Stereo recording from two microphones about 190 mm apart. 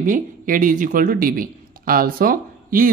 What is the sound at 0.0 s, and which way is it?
Speech, 45° right (ahead or behind).